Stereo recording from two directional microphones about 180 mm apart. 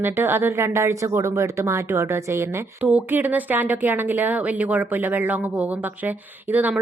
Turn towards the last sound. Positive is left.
turn(degrees=-10)  # may be behind; listen again after turning